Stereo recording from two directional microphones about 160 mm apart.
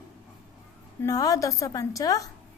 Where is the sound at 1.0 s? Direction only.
20° left (ahead or behind).